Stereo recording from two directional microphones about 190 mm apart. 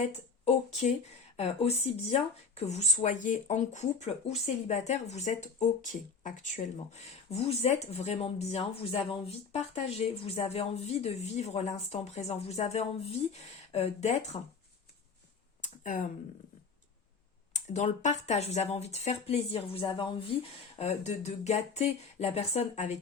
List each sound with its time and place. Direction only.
0.4 s speech: 40° left (ahead or behind)
15.6 s a sound: 45° left (ahead or behind)
17.5 s speech: 40° left (ahead or behind)